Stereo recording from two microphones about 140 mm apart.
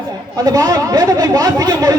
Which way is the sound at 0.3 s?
25° right (ahead or behind).